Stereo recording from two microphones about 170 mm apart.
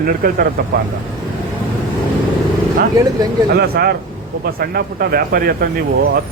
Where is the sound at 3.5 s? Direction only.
70° right (ahead or behind).